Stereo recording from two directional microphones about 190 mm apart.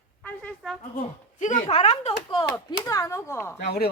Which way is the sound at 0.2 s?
5° left (ahead or behind).